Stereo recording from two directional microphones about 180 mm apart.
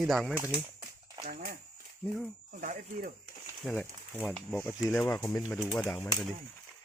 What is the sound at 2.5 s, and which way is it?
Speech, 45° right (ahead or behind).